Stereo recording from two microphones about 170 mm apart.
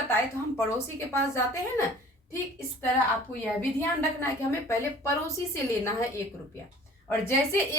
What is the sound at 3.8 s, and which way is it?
A woman's voice, 15° left (ahead or behind).